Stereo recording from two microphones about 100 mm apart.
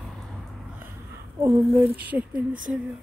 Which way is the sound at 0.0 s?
Centre (ahead or behind).